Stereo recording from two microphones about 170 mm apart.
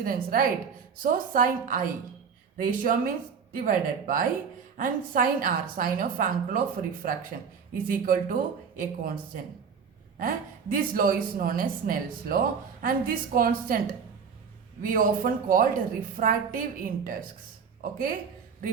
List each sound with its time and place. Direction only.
0.0 s a woman's voice: 55° right (ahead or behind)